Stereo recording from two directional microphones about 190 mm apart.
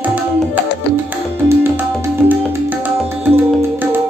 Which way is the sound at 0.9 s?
10° right (ahead or behind).